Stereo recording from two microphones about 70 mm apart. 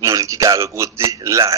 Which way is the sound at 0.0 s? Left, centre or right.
Right.